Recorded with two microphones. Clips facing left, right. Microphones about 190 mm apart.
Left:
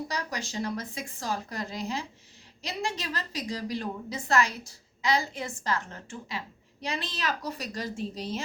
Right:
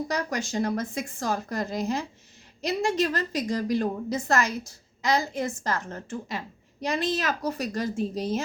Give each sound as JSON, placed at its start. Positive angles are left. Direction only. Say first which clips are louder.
{"t": 0.1, "sound": "a woman's voice", "louder": "right 6 dB", "side_deg": -50}